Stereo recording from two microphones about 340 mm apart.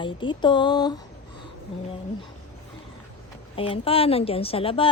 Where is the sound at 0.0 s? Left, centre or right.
Centre.